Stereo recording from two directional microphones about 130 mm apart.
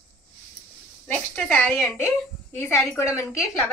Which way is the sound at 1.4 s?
10° left (ahead or behind).